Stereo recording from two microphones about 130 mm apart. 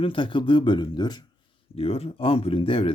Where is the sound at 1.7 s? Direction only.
50° left (ahead or behind).